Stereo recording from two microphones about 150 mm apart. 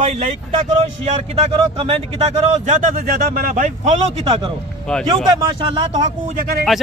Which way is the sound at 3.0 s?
80° right.